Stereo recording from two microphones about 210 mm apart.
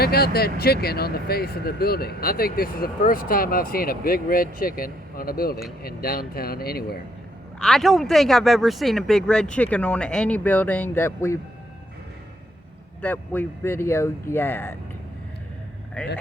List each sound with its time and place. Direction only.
0.0 s speech: 50° left (ahead or behind)
7.6 s speech: centre (ahead or behind)
13.0 s speech: 10° left (ahead or behind)